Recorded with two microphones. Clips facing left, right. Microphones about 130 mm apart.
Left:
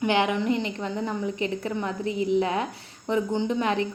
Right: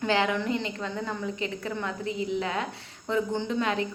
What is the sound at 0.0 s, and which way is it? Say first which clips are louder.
A woman's voice: left 2 dB; 20° left (ahead or behind).